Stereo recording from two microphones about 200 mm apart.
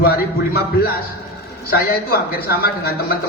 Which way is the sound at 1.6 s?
50° left (ahead or behind).